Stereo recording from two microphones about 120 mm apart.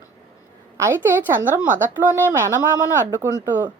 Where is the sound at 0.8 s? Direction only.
20° right (ahead or behind).